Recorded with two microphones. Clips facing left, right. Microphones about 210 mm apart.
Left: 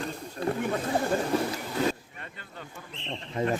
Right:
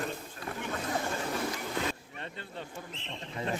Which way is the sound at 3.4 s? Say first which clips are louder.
Left 7 dB; 40° left (ahead or behind).